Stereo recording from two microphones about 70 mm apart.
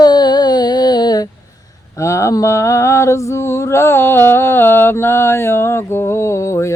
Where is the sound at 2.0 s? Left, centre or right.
Left.